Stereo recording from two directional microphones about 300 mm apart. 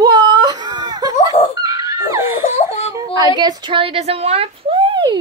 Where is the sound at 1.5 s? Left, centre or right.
Centre.